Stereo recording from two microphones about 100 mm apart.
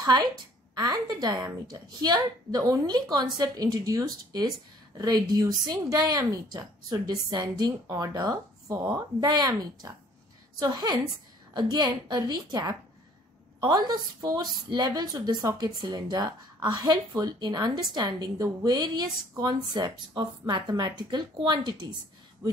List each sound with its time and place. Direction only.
0.0 s a woman's voice: 40° right (ahead or behind)
22.4 s speech: 30° right (ahead or behind)